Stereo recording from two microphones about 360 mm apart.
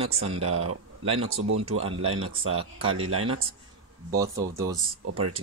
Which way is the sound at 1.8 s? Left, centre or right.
Centre.